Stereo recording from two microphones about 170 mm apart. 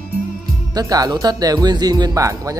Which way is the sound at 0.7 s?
20° right (ahead or behind).